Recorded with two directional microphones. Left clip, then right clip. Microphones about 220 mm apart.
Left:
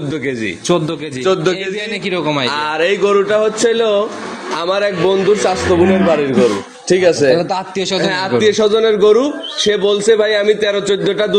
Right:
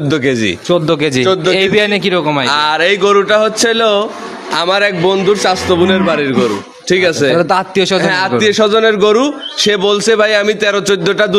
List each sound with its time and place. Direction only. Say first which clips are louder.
1.2 s a man's voice: right 2 dB; 10° right (ahead or behind)
2.5 s a man's voice: right 4 dB; 45° right (ahead or behind)